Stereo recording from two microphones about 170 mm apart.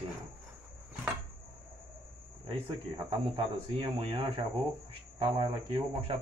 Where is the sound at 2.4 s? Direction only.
35° right (ahead or behind).